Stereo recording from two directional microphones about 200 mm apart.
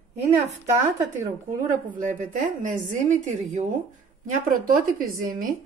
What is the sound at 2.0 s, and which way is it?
A woman's voice, 40° right (ahead or behind).